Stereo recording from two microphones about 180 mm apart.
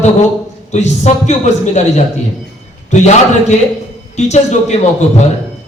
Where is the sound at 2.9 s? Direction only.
40° left (ahead or behind).